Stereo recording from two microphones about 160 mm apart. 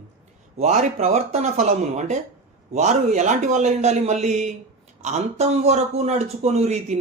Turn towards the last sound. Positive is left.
turn(degrees=-45)  # may be behind; listen again after turning